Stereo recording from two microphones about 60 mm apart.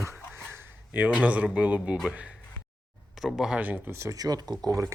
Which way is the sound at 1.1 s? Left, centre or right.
Right.